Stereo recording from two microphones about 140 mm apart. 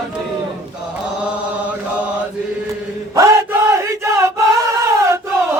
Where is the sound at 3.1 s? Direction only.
20° right (ahead or behind).